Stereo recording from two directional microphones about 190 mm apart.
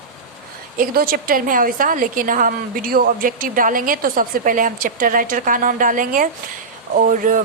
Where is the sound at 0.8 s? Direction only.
50° right (ahead or behind).